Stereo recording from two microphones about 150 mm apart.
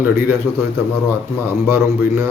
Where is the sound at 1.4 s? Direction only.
15° right (ahead or behind).